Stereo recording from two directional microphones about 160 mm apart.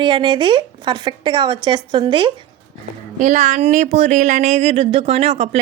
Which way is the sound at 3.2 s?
50° right (ahead or behind).